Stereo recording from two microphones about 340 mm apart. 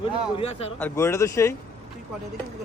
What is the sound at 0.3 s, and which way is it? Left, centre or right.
Speech, centre.